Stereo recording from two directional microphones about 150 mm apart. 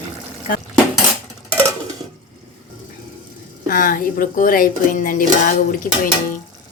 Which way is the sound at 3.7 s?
65° left (ahead or behind).